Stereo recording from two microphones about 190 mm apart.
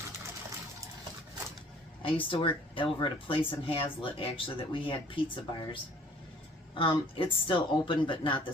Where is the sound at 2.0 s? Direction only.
30° left (ahead or behind).